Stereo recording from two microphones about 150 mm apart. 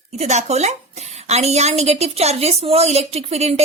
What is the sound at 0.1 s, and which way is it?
A woman's voice, 50° right (ahead or behind).